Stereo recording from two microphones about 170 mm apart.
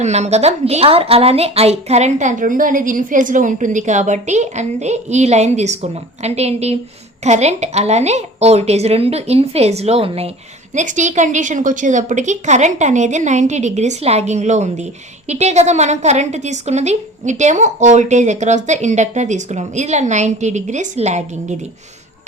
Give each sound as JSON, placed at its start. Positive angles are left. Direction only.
{"t": 0.0, "sound": "a woman's voice", "side_deg": -40}